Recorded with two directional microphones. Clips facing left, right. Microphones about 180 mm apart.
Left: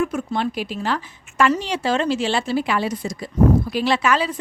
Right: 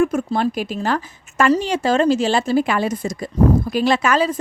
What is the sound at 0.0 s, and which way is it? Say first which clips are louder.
Speech: right 4 dB; 45° right (ahead or behind).